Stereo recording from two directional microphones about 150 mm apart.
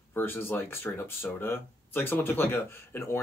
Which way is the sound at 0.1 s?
15° left (ahead or behind).